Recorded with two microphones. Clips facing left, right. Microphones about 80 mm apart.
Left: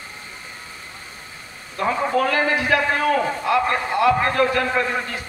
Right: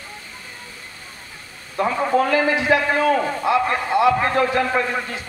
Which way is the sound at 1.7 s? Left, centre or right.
Centre.